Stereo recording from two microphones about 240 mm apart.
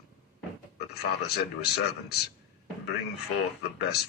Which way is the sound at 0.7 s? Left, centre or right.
Left.